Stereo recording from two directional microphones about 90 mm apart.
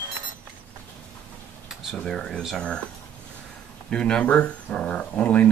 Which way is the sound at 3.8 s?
10° left (ahead or behind).